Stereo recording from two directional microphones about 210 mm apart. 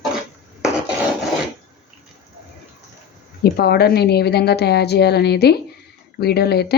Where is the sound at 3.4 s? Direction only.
50° left (ahead or behind).